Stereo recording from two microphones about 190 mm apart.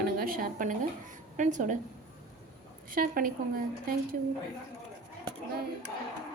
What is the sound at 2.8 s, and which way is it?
A woman's voice, 45° right (ahead or behind).